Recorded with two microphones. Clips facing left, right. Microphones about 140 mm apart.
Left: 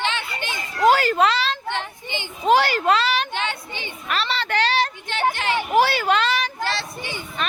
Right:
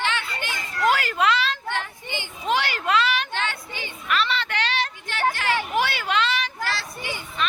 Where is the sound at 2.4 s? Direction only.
40° left (ahead or behind).